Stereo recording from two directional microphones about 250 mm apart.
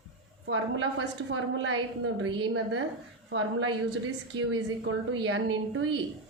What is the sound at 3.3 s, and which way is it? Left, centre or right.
Speech, right.